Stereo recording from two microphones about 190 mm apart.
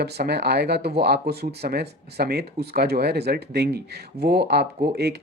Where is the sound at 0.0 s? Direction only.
60° right (ahead or behind).